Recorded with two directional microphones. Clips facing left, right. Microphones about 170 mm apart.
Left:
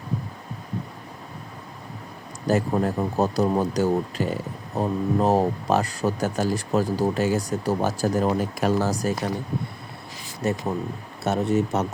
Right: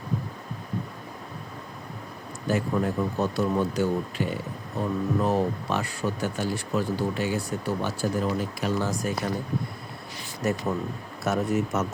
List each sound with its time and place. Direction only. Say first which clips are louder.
2.5 s speech: left 3 dB; 40° left (ahead or behind)
11.2 s speech: left 3 dB; 30° left (ahead or behind)